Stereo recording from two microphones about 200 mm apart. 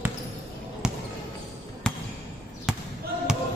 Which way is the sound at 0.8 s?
5° right (ahead or behind).